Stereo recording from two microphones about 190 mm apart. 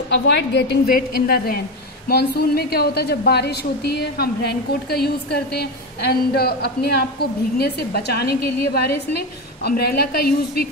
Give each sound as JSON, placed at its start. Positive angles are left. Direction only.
{"t": 0.1, "sound": "a woman's voice", "side_deg": 60}